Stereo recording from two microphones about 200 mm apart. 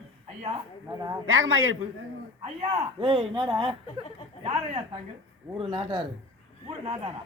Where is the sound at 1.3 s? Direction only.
85° right.